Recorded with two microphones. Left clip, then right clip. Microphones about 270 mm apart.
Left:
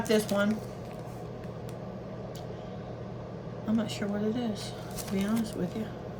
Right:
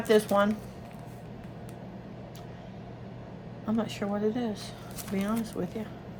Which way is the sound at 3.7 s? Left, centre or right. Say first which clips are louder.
Right 1 dB; right.